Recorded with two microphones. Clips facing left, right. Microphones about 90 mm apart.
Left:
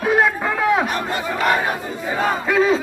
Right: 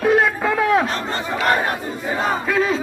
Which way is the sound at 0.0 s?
Centre (ahead or behind).